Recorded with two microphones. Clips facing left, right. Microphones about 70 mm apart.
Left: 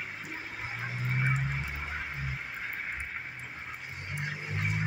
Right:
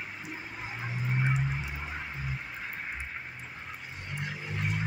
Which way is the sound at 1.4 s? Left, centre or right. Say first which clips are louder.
Right 1 dB; centre.